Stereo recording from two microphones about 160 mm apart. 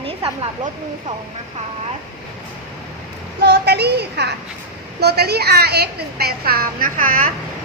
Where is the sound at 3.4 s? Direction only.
90° right.